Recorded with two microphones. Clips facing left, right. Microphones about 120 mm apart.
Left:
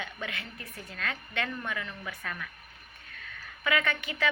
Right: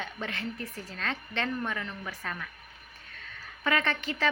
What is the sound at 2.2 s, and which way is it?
Speech, 15° right (ahead or behind).